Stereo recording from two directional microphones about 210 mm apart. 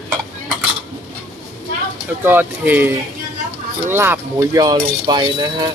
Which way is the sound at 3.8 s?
10° right (ahead or behind).